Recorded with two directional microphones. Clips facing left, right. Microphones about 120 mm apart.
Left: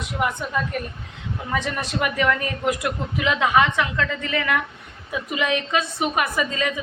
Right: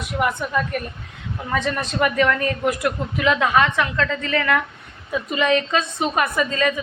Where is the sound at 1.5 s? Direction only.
15° left (ahead or behind).